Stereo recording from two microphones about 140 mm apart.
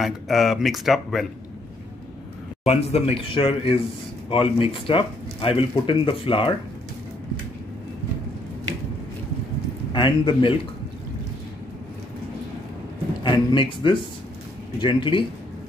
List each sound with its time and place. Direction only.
0.0 s speech: centre (ahead or behind)
2.6 s speech: 50° left (ahead or behind)
9.9 s speech: 35° left (ahead or behind)
13.2 s speech: 35° left (ahead or behind)